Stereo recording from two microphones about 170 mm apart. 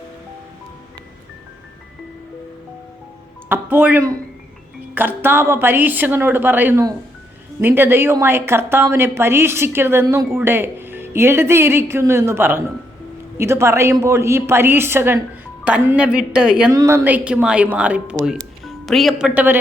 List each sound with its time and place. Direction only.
3.5 s a woman's voice: 10° right (ahead or behind)
16.7 s a woman's voice: 15° right (ahead or behind)